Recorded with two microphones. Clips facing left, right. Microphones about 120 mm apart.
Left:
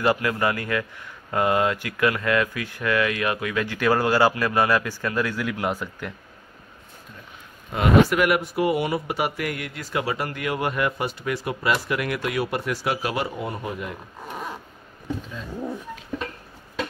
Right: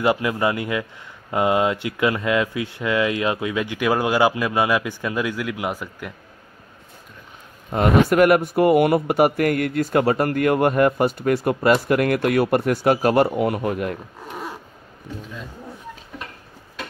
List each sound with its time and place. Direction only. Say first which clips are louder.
0.0 s a man's voice: right 2 dB; 20° right (ahead or behind)
7.7 s speech: right 2 dB; 45° right (ahead or behind)
13.4 s speech: right 8 dB; 65° right (ahead or behind)